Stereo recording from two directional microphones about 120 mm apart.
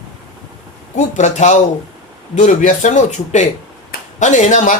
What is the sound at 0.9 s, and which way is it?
Speech, 90° left.